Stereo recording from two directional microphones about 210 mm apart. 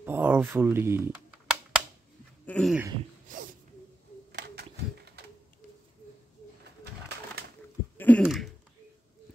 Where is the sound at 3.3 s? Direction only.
40° right (ahead or behind).